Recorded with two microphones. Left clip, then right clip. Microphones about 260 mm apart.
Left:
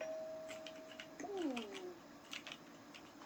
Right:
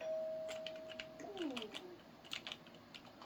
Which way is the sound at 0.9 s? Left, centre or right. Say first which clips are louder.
Left 2 dB; right.